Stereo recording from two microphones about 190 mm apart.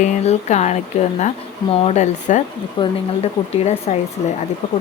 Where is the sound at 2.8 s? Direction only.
25° left (ahead or behind).